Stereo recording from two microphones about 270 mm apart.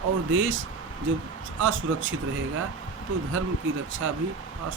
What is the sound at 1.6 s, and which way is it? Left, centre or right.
Speech, right.